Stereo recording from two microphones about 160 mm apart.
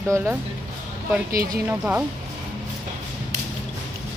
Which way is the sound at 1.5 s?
10° right (ahead or behind).